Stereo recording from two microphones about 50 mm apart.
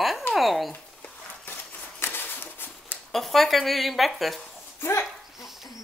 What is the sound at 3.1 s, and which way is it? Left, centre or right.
Speech, centre.